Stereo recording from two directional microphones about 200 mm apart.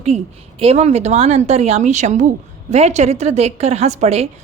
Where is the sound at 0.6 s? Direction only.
30° right (ahead or behind).